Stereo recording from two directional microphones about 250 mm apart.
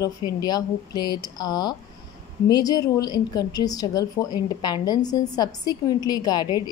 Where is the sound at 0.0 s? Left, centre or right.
Centre.